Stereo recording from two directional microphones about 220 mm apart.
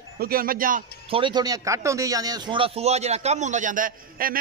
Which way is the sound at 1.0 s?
25° right (ahead or behind).